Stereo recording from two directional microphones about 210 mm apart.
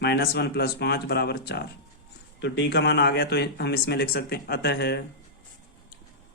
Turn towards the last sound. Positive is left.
turn(degrees=50)  # may be behind; listen again after turning